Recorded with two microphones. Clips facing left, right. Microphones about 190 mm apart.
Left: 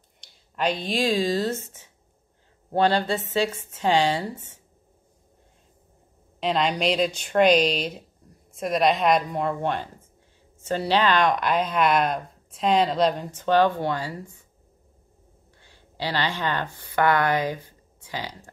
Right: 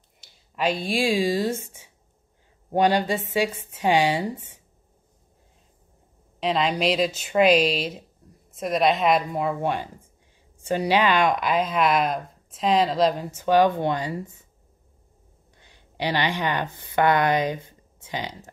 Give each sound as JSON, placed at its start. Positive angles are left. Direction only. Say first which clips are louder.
{"t": 0.2, "sound": "speech", "louder": "right 1 dB", "side_deg": -5}
{"t": 6.4, "sound": "a woman's voice", "louder": "right 1 dB", "side_deg": 0}
{"t": 15.6, "sound": "speech", "louder": "right 3 dB", "side_deg": -20}